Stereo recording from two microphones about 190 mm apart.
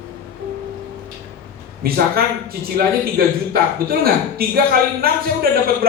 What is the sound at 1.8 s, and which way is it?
A man's voice, 50° right (ahead or behind).